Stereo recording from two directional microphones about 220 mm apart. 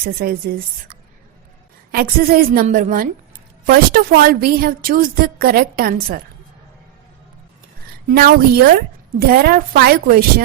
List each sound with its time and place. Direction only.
0.0 s a woman's voice: 45° right (ahead or behind)
8.0 s a woman's voice: 45° right (ahead or behind)